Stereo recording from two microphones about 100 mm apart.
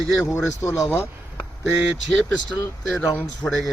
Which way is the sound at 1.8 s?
Centre (ahead or behind).